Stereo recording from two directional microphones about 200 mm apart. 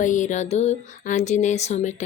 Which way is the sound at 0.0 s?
40° left (ahead or behind).